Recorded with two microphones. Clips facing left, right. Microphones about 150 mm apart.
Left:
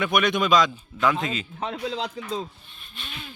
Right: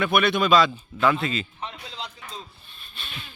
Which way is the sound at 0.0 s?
15° left (ahead or behind).